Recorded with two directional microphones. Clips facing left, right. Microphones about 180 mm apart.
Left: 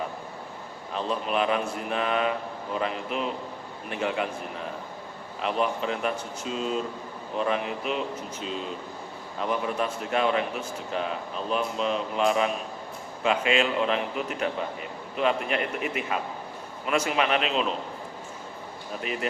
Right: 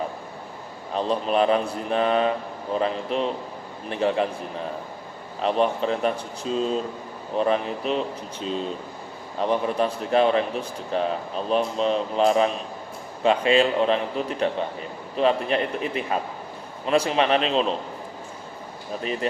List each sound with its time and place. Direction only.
0.9 s a man's voice: 35° right (ahead or behind)
5.4 s a man's voice: 35° right (ahead or behind)
9.4 s a man's voice: 35° right (ahead or behind)
19.2 s speech: 30° right (ahead or behind)